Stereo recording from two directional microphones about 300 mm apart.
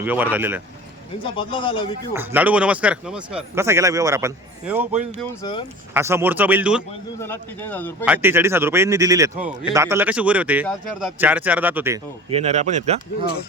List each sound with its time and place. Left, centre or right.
0.0 s speech: centre
1.2 s speech: centre
2.1 s speech: centre
4.9 s speech: right
5.4 s speech: centre
5.9 s speech: centre
7.2 s speech: centre
8.0 s speech: centre
12.3 s speech: right